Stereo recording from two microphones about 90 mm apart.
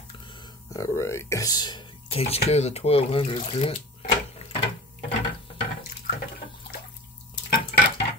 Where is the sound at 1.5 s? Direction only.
50° left (ahead or behind).